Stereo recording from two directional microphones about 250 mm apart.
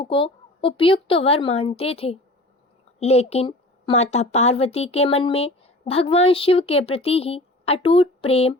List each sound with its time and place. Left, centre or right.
0.0 s speech: left